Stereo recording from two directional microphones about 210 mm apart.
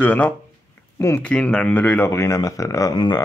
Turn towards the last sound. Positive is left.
turn(degrees=20)  # may be behind; listen again after turning